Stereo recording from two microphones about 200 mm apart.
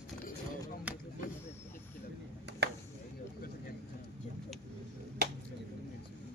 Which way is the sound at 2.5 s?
60° right (ahead or behind).